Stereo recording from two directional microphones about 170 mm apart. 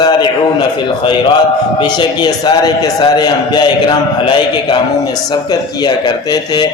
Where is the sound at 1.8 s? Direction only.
25° left (ahead or behind).